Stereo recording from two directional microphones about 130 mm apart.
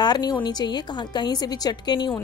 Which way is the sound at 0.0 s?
30° left (ahead or behind).